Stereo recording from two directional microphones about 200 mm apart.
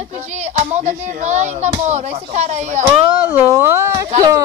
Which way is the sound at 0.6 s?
35° right (ahead or behind).